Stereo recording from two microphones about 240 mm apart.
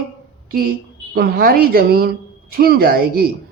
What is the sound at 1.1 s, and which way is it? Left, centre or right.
A woman's voice, right.